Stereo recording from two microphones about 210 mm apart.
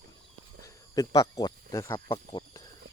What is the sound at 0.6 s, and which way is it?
Cricket, 15° left (ahead or behind).